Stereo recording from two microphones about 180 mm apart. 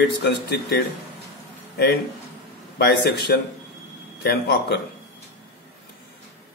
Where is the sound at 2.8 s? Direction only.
65° left (ahead or behind).